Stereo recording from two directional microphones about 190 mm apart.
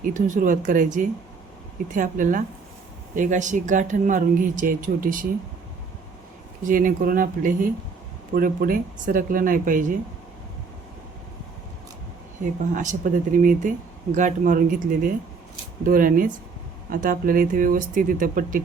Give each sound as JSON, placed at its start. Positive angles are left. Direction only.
{"t": 0.0, "sound": "speech", "side_deg": -45}
{"t": 6.7, "sound": "speech", "side_deg": -45}
{"t": 12.7, "sound": "speech", "side_deg": -40}